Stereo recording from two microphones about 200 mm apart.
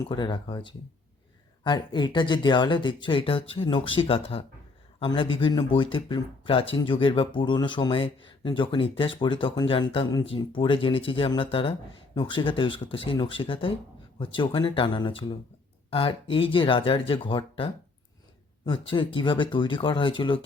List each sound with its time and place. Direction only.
0.1 s speech: 20° left (ahead or behind)